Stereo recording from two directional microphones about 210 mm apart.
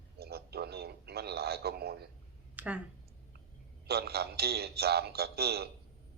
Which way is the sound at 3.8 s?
50° right (ahead or behind).